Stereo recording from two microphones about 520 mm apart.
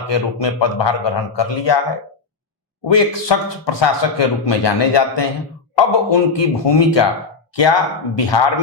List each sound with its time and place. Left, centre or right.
0.1 s a man's voice: left
2.8 s a man's voice: left